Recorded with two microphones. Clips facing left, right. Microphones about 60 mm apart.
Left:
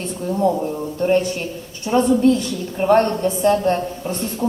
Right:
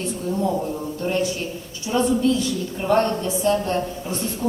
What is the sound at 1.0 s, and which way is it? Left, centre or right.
A woman's voice, left.